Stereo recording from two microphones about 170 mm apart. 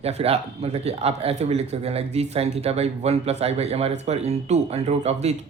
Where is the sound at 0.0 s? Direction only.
35° right (ahead or behind).